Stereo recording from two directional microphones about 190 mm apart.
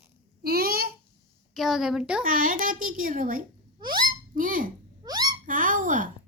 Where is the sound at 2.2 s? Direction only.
45° right (ahead or behind).